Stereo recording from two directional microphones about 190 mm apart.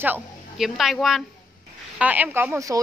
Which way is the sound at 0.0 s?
5° right (ahead or behind).